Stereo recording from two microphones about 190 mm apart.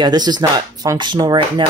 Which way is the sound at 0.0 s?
20° right (ahead or behind).